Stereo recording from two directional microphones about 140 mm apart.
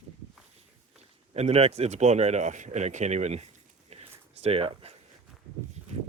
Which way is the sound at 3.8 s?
50° right (ahead or behind).